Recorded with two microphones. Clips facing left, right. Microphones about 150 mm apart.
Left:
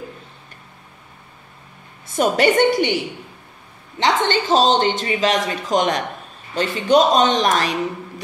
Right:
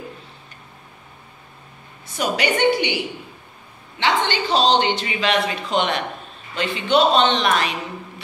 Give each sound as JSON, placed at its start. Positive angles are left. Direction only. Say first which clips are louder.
{"t": 2.1, "sound": "speech", "louder": "left 6 dB", "side_deg": 45}
{"t": 4.0, "sound": "speech", "louder": "left 2 dB", "side_deg": 40}